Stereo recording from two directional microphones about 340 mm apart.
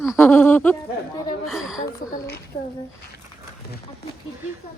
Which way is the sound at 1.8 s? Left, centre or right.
Left.